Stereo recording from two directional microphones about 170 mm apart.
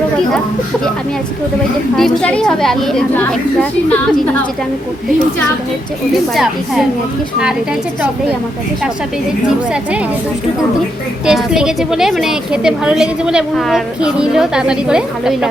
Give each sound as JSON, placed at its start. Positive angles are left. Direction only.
{"t": 2.0, "sound": "a woman's voice", "side_deg": 5}
{"t": 6.3, "sound": "a woman's voice", "side_deg": 0}
{"t": 11.3, "sound": "a woman's voice", "side_deg": -5}